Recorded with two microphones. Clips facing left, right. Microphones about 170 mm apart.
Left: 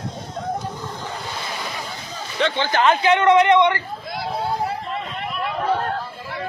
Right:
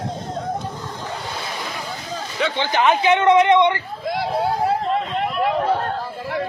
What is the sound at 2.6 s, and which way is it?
Speech, 15° right (ahead or behind).